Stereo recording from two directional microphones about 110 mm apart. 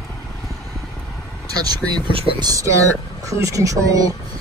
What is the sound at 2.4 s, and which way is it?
Speech, 30° right (ahead or behind).